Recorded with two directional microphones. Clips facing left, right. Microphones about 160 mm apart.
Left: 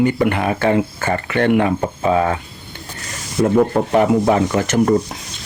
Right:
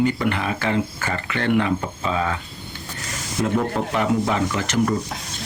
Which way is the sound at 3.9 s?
55° left (ahead or behind).